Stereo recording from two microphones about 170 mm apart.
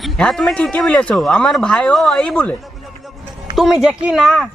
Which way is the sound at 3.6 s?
Centre (ahead or behind).